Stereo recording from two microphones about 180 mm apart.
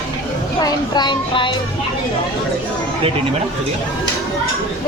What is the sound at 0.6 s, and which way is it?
Speech, 25° left (ahead or behind).